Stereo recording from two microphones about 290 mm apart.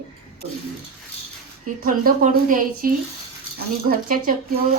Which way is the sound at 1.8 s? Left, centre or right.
Right.